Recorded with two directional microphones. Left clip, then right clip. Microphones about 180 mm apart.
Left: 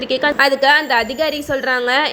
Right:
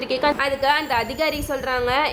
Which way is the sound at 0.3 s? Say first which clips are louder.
Left 7 dB; 30° left (ahead or behind).